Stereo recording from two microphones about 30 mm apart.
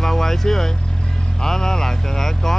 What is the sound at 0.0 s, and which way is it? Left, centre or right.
Vehicle, centre.